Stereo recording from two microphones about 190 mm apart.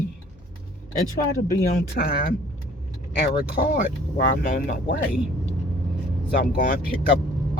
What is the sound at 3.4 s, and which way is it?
Speech, 50° left (ahead or behind).